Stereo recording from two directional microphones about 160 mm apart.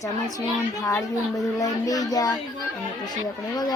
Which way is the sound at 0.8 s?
20° left (ahead or behind).